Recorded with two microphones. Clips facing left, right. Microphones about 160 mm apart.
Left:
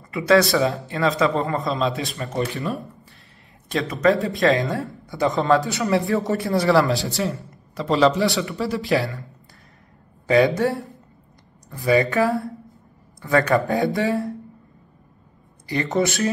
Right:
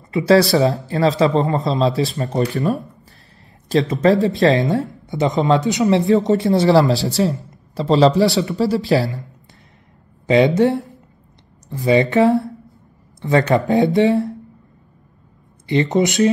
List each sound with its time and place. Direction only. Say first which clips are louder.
0.3 s a man's voice: right 3 dB; 35° right (ahead or behind)
3.6 s a man's voice: right 4 dB; 30° right (ahead or behind)
10.2 s speech: right 4 dB; 20° right (ahead or behind)
15.6 s speech: right 5 dB; 20° right (ahead or behind)